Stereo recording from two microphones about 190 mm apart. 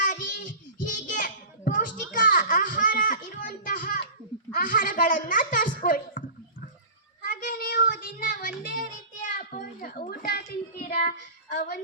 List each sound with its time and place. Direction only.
0.0 s child singing: 45° left (ahead or behind)
2.1 s a sound: 45° left (ahead or behind)
7.2 s child singing: 45° left (ahead or behind)